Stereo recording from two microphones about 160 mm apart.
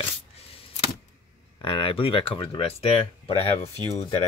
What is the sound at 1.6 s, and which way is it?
Speech, 35° left (ahead or behind).